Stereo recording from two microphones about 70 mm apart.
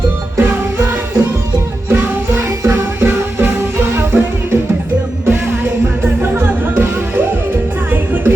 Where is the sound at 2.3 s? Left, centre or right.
Right.